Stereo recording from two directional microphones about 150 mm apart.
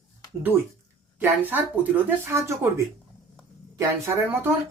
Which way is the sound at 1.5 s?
10° right (ahead or behind).